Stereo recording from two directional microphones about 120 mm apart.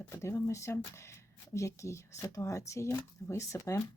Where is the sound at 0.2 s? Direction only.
20° left (ahead or behind).